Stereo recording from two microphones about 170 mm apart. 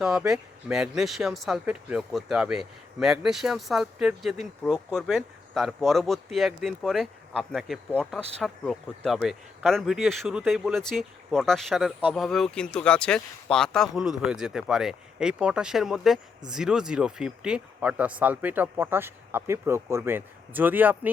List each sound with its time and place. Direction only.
0.0 s speech: 5° right (ahead or behind)